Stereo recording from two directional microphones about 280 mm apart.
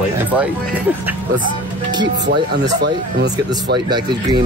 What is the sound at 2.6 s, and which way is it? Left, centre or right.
Speech, right.